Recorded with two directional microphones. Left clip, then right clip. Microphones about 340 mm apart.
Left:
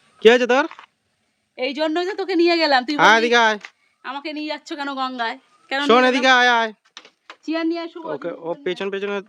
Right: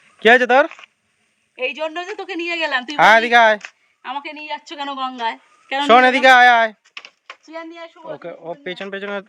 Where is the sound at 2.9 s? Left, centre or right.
Centre.